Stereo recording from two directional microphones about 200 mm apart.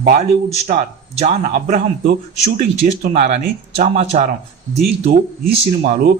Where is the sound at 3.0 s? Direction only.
35° right (ahead or behind).